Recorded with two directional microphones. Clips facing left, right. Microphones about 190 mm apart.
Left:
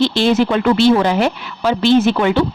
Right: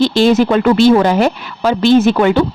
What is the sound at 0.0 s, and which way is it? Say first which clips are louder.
A woman's voice: right 3 dB; 45° right (ahead or behind).